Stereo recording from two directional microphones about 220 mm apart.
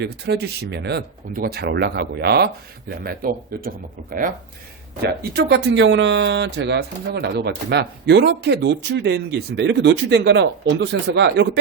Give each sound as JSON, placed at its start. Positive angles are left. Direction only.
{"t": 0.0, "sound": "speech", "side_deg": -50}
{"t": 5.0, "sound": "speech", "side_deg": -50}